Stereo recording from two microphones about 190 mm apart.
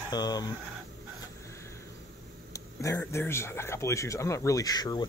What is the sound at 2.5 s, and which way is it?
Speech, 15° left (ahead or behind).